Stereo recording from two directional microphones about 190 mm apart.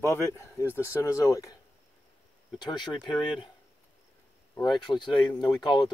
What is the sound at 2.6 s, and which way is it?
Speech, 25° left (ahead or behind).